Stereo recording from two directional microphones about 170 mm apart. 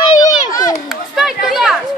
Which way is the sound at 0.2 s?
20° left (ahead or behind).